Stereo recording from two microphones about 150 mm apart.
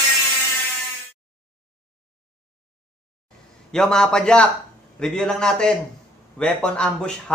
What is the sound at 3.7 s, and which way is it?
A man's voice, 5° left (ahead or behind).